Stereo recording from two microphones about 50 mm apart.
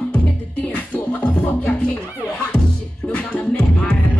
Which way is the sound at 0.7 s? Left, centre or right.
Left.